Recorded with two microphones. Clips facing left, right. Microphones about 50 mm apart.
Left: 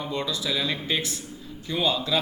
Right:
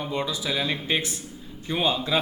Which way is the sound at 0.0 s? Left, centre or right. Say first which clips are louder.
Right 1 dB; centre.